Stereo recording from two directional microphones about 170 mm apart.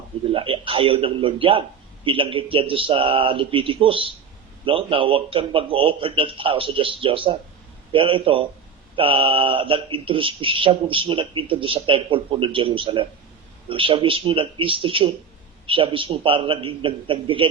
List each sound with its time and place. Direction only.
0.3 s speech: 30° right (ahead or behind)